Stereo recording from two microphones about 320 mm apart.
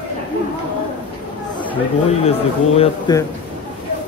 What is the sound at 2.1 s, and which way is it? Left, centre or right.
A man's voice, centre.